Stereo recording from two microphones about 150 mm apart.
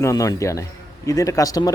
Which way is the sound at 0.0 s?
20° left (ahead or behind).